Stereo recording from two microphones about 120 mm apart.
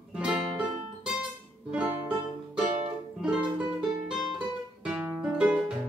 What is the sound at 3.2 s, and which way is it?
Music, 5° right (ahead or behind).